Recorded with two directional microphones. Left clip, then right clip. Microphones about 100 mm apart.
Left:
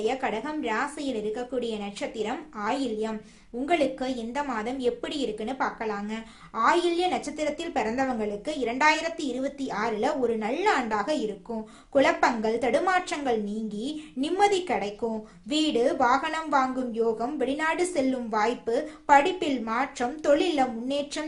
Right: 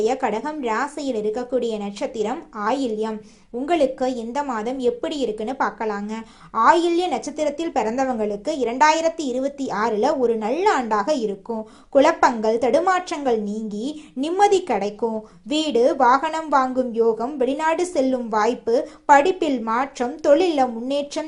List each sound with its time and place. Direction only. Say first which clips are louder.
0.0 s a woman's voice: right 6 dB; 50° right (ahead or behind)